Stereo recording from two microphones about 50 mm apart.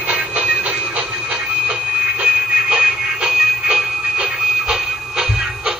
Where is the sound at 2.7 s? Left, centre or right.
Centre.